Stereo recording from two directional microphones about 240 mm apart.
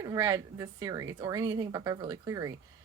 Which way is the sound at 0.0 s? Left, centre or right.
Centre.